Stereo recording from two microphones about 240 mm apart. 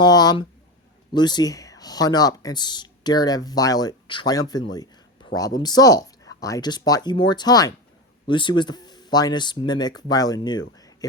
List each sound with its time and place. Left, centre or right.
0.0 s speech: centre